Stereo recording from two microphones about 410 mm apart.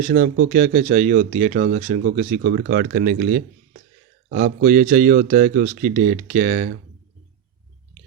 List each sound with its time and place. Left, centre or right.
0.0 s speech: centre